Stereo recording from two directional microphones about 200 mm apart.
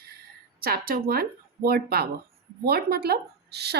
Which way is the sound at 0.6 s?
45° right (ahead or behind).